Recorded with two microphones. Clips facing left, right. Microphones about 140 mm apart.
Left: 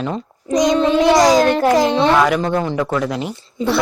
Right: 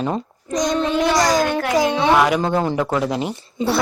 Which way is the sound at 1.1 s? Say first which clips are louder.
Left 5 dB; 10° left (ahead or behind).